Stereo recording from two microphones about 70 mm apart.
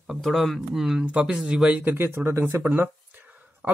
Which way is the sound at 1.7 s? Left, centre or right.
Right.